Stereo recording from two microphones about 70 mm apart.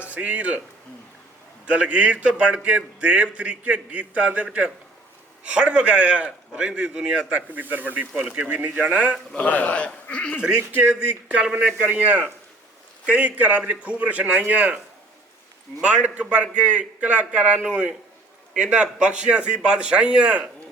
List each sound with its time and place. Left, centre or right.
0.0 s speech: right
1.6 s a man's voice: centre
9.3 s speech: left
10.4 s a man's voice: centre
15.8 s a man's voice: centre